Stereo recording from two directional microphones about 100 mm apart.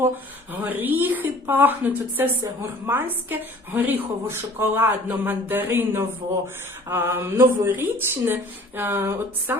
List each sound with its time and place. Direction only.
0.6 s a woman's voice: 20° right (ahead or behind)